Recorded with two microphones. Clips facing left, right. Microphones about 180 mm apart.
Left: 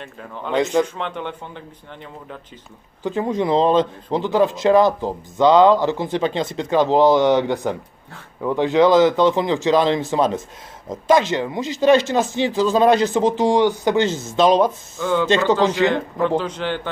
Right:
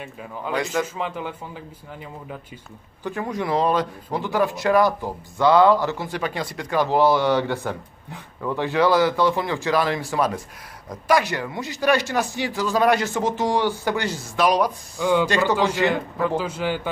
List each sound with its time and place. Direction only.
0.0 s a man's voice: 5° right (ahead or behind)
3.0 s speech: 20° left (ahead or behind)
15.0 s a man's voice: 15° right (ahead or behind)
15.2 s speech: 25° left (ahead or behind)
15.9 s a man's voice: 10° right (ahead or behind)